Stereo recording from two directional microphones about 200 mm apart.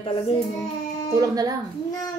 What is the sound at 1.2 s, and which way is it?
Speech, 15° right (ahead or behind).